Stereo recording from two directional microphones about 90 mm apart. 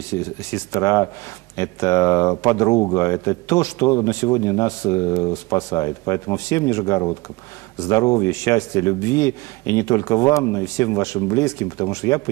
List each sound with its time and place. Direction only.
0.1 s speech: 35° left (ahead or behind)